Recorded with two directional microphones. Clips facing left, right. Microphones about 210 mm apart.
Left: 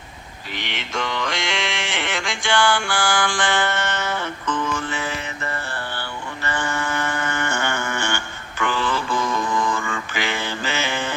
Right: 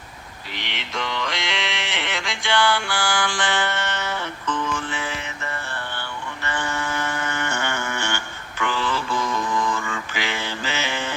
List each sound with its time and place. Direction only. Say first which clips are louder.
0.5 s music: left 3 dB; 50° left (ahead or behind)